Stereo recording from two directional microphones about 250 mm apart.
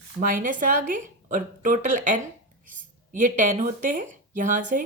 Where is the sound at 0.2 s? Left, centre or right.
Right.